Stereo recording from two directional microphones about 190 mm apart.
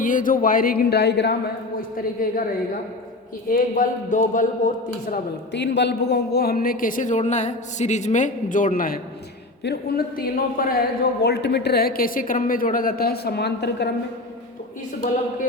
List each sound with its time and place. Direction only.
0.0 s a man's voice: 45° left (ahead or behind); by 1.4 s 60° left (ahead or behind)
2.2 s a man's voice: 45° left (ahead or behind)
3.5 s a man's voice: 45° left (ahead or behind)
5.1 s a man's voice: 60° left (ahead or behind)